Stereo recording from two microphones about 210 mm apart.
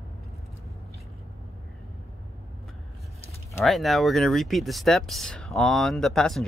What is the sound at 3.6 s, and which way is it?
Speech, centre (ahead or behind).